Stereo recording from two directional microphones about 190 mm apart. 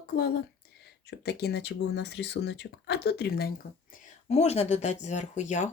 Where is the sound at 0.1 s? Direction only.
55° left (ahead or behind).